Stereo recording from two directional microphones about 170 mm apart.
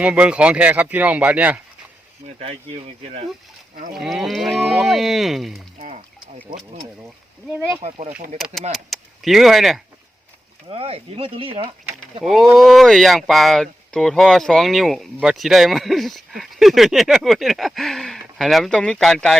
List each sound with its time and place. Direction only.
0.0 s speech: 10° right (ahead or behind)
2.4 s speech: 40° right (ahead or behind)
3.9 s speech: centre (ahead or behind)
7.4 s speech: 10° right (ahead or behind)
7.8 s speech: 40° right (ahead or behind)
8.7 s speech: centre (ahead or behind)
10.7 s speech: 35° right (ahead or behind)
12.2 s speech: centre (ahead or behind)